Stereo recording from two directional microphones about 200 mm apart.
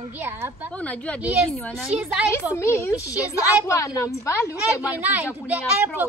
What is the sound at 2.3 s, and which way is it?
A child's voice, 15° left (ahead or behind).